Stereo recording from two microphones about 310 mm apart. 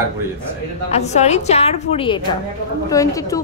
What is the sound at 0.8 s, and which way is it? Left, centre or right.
A woman's voice, left.